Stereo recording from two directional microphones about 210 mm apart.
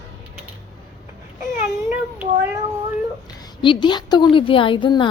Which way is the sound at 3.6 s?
20° left (ahead or behind).